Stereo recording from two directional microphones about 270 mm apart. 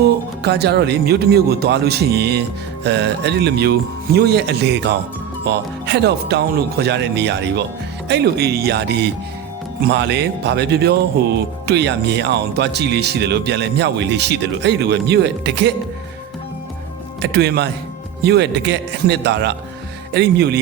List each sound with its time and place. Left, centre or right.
0.4 s speech: right
17.2 s speech: right